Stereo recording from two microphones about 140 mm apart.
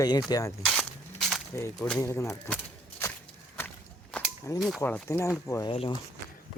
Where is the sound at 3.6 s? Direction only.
15° left (ahead or behind).